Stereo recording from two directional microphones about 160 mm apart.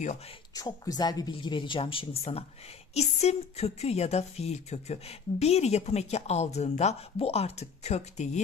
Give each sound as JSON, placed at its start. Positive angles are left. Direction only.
{"t": 0.6, "sound": "a woman's voice", "side_deg": 25}